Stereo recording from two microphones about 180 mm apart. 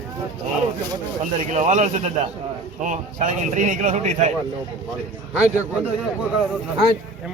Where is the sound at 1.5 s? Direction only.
40° right (ahead or behind).